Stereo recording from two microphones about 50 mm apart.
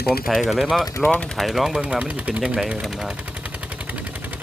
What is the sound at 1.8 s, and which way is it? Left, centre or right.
Speech, centre.